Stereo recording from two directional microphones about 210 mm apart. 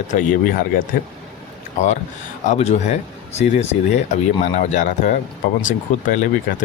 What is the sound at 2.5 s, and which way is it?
Speech, 30° left (ahead or behind).